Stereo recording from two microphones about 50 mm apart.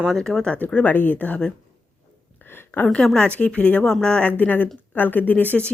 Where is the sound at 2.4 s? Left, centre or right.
Left.